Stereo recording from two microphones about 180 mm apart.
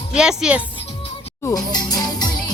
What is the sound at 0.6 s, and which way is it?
Music, 25° left (ahead or behind).